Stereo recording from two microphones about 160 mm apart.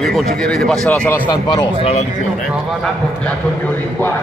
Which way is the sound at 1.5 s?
35° left (ahead or behind).